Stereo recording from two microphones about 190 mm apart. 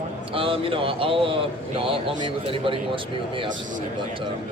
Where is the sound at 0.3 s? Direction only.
30° right (ahead or behind).